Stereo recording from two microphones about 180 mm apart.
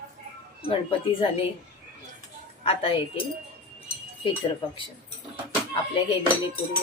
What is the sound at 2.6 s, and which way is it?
Speech, 30° left (ahead or behind).